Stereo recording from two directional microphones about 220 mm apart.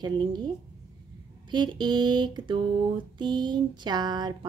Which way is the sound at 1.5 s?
20° right (ahead or behind).